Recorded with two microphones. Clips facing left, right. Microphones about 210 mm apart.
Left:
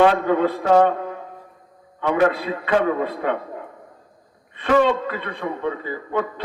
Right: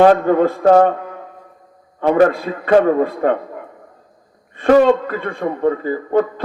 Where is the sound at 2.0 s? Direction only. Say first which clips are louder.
Right 6 dB; 45° right (ahead or behind).